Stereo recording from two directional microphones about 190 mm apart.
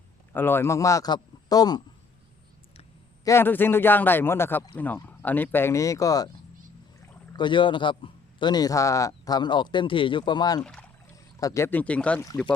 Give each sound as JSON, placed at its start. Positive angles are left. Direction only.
{"t": 0.3, "sound": "speech", "side_deg": 10}
{"t": 3.2, "sound": "speech", "side_deg": 10}
{"t": 7.3, "sound": "a man's voice", "side_deg": 25}
{"t": 10.6, "sound": "speech", "side_deg": 5}
{"t": 11.3, "sound": "speech", "side_deg": 15}